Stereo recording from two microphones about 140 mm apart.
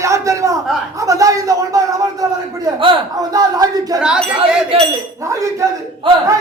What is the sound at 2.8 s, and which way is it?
Speech, 40° right (ahead or behind).